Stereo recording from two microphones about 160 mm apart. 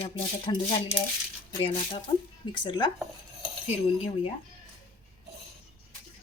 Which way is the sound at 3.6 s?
45° left (ahead or behind).